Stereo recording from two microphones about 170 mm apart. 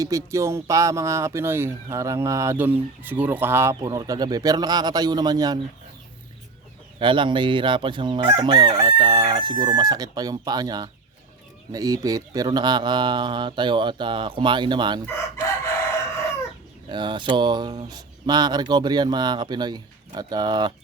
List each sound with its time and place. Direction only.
0.0 s speech: 20° right (ahead or behind)
7.0 s chicken: 30° right (ahead or behind)
16.9 s chicken: 25° right (ahead or behind)